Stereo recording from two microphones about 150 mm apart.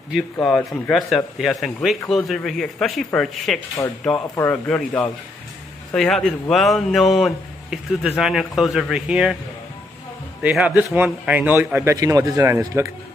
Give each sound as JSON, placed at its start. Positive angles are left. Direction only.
{"t": 0.1, "sound": "speech", "side_deg": 5}
{"t": 3.8, "sound": "speech", "side_deg": 20}
{"t": 4.4, "sound": "speech", "side_deg": 10}
{"t": 10.4, "sound": "a man's voice", "side_deg": -10}